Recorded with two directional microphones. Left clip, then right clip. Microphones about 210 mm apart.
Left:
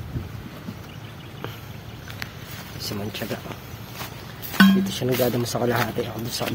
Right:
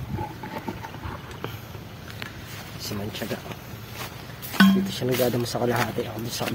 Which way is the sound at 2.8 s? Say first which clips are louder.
Left 1 dB; 5° left (ahead or behind).